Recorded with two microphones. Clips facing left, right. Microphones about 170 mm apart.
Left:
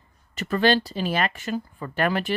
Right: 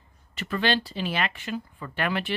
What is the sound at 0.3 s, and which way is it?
Speech, 40° left (ahead or behind).